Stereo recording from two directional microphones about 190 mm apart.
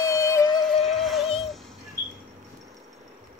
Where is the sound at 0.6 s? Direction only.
Centre (ahead or behind).